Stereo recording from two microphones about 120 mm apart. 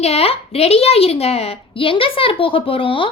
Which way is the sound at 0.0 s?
55° left (ahead or behind).